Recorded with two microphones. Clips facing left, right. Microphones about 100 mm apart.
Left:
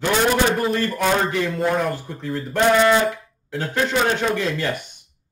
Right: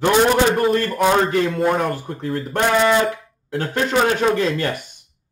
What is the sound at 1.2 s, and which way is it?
Speech, 50° right (ahead or behind).